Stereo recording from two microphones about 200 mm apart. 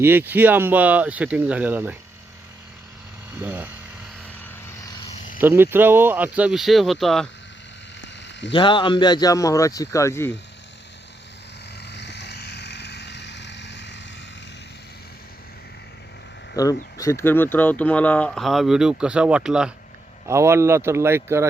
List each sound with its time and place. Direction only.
0.0 s speech: 10° right (ahead or behind)
3.4 s speech: 10° right (ahead or behind)
5.4 s speech: 10° right (ahead or behind)
8.0 s a sound: 60° left (ahead or behind)
8.5 s speech: 25° left (ahead or behind)
11.8 s vehicle: 60° left (ahead or behind)
16.6 s speech: 15° left (ahead or behind); by 21.4 s 15° right (ahead or behind)